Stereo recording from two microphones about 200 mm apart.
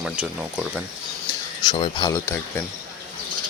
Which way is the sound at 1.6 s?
20° left (ahead or behind).